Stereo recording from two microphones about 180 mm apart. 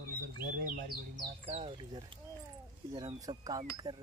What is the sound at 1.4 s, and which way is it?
Speech, 30° right (ahead or behind).